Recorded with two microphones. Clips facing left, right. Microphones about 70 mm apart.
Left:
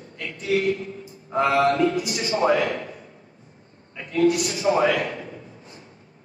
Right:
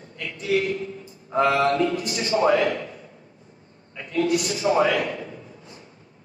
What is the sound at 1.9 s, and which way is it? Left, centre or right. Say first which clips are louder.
Speech: even; right.